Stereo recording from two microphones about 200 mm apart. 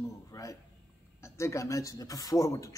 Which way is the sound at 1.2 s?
15° left (ahead or behind).